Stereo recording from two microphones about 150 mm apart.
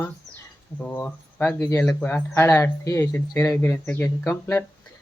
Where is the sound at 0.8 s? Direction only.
10° left (ahead or behind).